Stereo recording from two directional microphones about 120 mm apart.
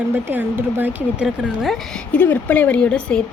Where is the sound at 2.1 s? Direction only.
15° left (ahead or behind).